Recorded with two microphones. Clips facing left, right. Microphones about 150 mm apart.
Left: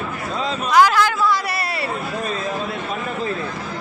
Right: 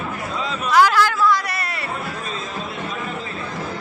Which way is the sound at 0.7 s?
10° left (ahead or behind).